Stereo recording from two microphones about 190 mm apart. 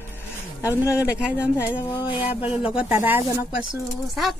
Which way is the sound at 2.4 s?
5° right (ahead or behind).